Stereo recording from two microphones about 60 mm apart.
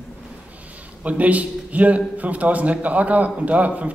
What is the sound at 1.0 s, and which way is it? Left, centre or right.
A man's voice, right.